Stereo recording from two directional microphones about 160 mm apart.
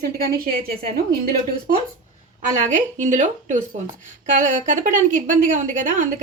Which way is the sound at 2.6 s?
50° right (ahead or behind).